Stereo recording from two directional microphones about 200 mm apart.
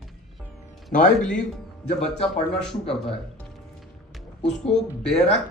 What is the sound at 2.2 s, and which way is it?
Speech, 5° left (ahead or behind).